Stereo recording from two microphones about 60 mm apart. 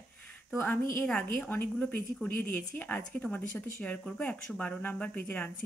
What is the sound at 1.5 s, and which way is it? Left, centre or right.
Speech, left.